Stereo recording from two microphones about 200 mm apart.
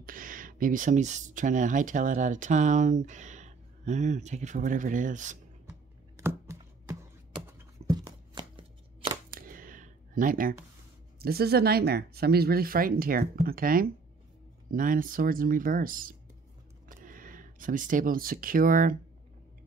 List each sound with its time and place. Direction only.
0.0 s speech: 45° right (ahead or behind)
5.7 s computer keyboard: 15° right (ahead or behind)
9.3 s a sound: 45° right (ahead or behind)
11.1 s speech: 50° right (ahead or behind)